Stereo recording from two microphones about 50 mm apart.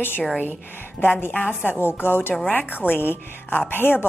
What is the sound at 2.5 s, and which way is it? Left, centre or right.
A woman's voice, left.